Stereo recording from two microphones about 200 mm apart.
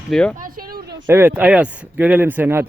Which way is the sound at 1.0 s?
10° right (ahead or behind).